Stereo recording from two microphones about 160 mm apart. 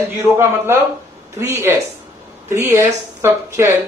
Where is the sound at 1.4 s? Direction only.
15° right (ahead or behind).